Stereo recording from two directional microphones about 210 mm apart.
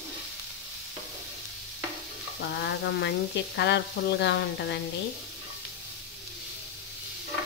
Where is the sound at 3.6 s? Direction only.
55° left (ahead or behind).